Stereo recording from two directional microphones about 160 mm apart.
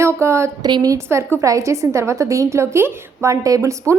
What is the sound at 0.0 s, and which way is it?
A woman's voice, 15° right (ahead or behind).